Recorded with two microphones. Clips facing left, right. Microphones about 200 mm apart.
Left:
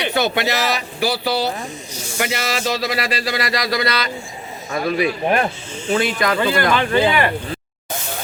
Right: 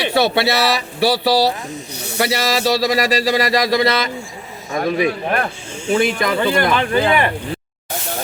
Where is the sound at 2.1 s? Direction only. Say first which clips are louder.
Right 4 dB; 35° right (ahead or behind).